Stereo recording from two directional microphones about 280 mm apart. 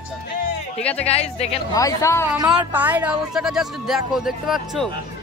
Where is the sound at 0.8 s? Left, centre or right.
Centre.